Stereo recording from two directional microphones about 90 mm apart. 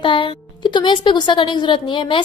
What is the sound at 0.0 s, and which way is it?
A woman's voice, 70° left (ahead or behind).